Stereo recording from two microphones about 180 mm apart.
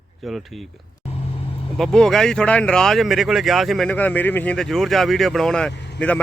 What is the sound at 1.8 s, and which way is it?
Speech, 5° left (ahead or behind).